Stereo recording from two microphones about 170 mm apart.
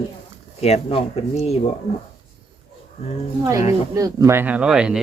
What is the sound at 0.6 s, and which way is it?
Speech, 35° left (ahead or behind).